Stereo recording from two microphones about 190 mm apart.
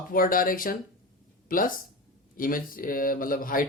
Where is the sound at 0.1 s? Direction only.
50° left (ahead or behind).